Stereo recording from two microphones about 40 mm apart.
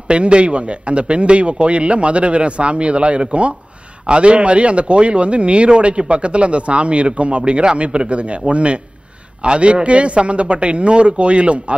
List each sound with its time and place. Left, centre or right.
0.1 s a man's voice: right